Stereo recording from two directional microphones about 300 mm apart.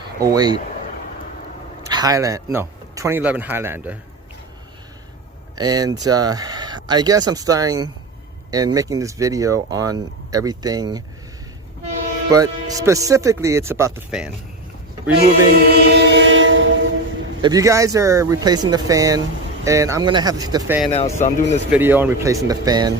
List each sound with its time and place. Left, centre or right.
0.2 s speech: centre
1.9 s a man's voice: centre
5.5 s speech: centre
12.3 s speech: centre
15.7 s train: right
17.4 s speech: centre
20.9 s speech: left
21.7 s speech: centre